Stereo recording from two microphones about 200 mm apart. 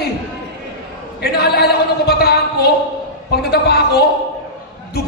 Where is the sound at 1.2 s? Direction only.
55° left (ahead or behind).